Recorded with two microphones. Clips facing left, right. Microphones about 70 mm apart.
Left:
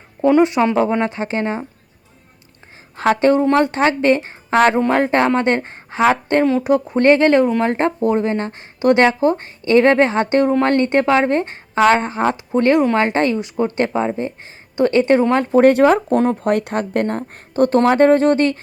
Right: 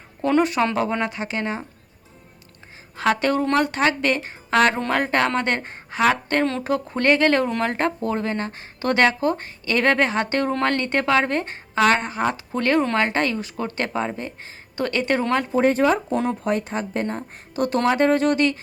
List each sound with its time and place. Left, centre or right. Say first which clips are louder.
0.2 s speech: left 6 dB; left
1.1 s speech: left 5 dB; left
2.9 s speech: left 6 dB; left
6.4 s speech: left 7 dB; centre
6.7 s speech: left 5 dB; left
15.6 s speech: left 7 dB; left